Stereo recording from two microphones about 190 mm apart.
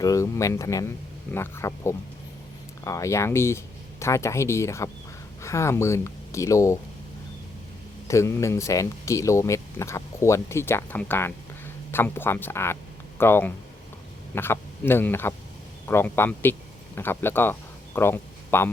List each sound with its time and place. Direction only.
0.0 s speech: 15° left (ahead or behind)
8.0 s speech: 15° left (ahead or behind)